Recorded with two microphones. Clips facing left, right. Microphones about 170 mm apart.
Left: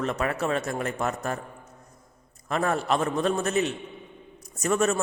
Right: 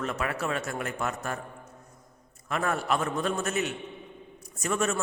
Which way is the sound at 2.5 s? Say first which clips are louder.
Left 3 dB; 35° left (ahead or behind).